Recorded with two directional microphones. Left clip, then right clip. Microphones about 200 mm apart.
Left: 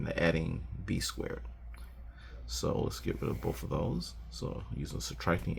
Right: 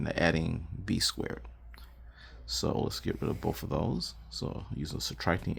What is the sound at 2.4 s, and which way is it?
Speech, 45° right (ahead or behind).